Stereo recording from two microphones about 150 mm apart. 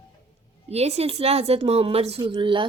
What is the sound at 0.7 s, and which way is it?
Speech, 45° right (ahead or behind).